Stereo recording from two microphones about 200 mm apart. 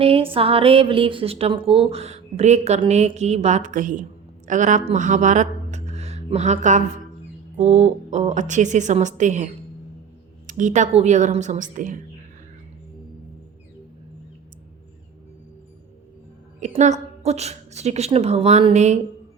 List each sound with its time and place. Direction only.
0.0 s a woman's voice: 30° right (ahead or behind)
16.6 s a woman's voice: 35° right (ahead or behind)